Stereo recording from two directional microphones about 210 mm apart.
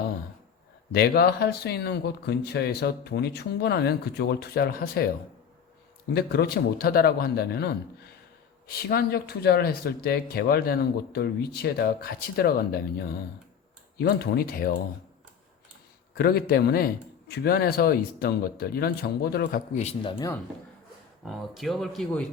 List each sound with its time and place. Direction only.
0.9 s a man's voice: 50° left (ahead or behind)
6.1 s a man's voice: 50° left (ahead or behind)
16.1 s a man's voice: 45° left (ahead or behind); by 20.3 s 20° left (ahead or behind)
21.2 s speech: centre (ahead or behind)